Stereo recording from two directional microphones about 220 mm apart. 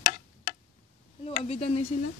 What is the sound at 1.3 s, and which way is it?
Speech, 30° left (ahead or behind).